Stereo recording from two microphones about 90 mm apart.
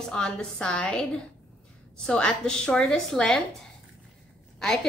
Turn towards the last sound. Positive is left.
turn(degrees=5)  # may be behind; listen again after turning